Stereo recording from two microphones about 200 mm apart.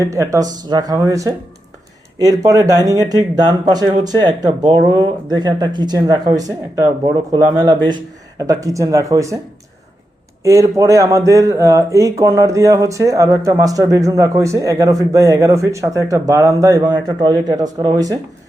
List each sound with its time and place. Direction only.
0.0 s speech: 15° right (ahead or behind)
10.4 s speech: 15° right (ahead or behind)